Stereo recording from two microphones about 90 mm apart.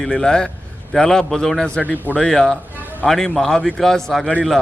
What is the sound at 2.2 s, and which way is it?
A man's voice, 5° left (ahead or behind).